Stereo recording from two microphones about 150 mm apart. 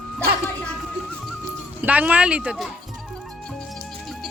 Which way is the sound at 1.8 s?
10° right (ahead or behind).